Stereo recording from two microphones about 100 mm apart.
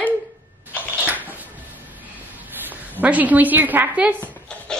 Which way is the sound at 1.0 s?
15° right (ahead or behind).